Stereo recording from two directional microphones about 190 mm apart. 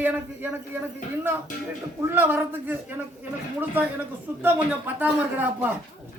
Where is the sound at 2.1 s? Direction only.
10° right (ahead or behind).